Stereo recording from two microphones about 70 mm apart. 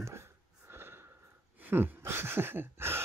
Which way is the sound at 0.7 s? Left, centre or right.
Right.